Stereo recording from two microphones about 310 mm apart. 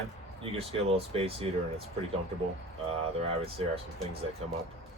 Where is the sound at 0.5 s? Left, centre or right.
Centre.